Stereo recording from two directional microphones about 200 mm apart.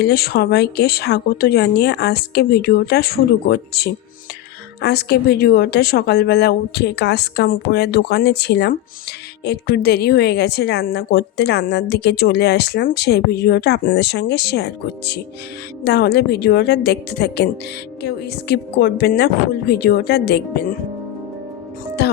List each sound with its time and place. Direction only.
0.0 s a woman's voice: 50° left (ahead or behind)
22.0 s speech: 55° left (ahead or behind)